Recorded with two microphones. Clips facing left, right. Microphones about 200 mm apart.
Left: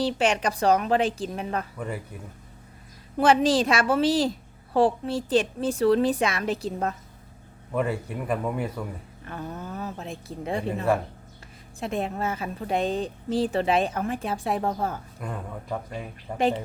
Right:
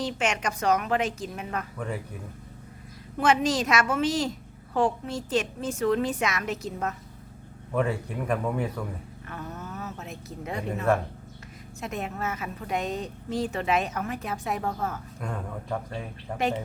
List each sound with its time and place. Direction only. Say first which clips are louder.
0.0 s a woman's voice: left 5 dB; 35° left (ahead or behind)
3.2 s a woman's voice: left 4 dB; 35° left (ahead or behind)
7.7 s a man's voice: even; 5° left (ahead or behind)
9.2 s a woman's voice: left 4 dB; 30° left (ahead or behind)
11.8 s a woman's voice: left 4 dB; 30° left (ahead or behind)
15.2 s a man's voice: right 2 dB; 5° left (ahead or behind)